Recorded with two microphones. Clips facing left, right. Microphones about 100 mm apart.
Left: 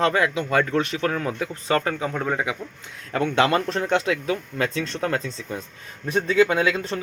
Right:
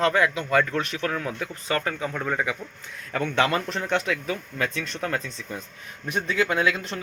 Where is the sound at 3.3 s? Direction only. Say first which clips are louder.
Left 3 dB; 30° left (ahead or behind).